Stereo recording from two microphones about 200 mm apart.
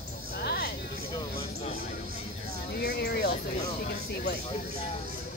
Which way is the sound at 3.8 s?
50° left (ahead or behind).